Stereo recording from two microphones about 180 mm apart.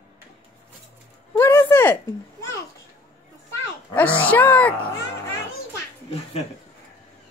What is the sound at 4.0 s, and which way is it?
Speech, 10° left (ahead or behind).